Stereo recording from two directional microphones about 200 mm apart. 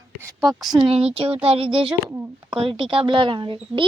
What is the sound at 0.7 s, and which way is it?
Speech, 25° right (ahead or behind).